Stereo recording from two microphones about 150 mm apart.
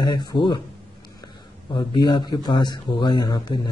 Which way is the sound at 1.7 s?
30° left (ahead or behind).